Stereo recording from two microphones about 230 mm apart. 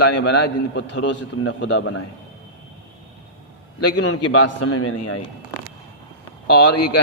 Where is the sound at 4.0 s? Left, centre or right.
Left.